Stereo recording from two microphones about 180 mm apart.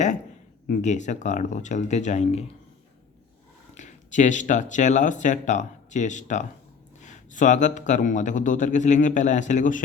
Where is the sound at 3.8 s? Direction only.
45° left (ahead or behind).